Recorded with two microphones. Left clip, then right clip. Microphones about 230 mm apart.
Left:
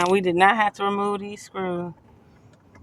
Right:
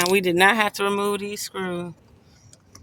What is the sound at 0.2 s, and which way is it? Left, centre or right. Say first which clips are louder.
Speech: even; right.